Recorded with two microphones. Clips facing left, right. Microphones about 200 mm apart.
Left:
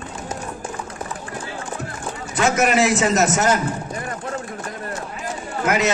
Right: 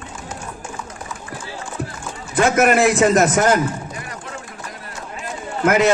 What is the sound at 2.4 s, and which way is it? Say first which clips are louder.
A man's voice: right 3 dB; 55° right (ahead or behind).